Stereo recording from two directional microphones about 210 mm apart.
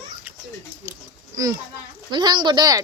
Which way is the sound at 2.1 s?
20° right (ahead or behind).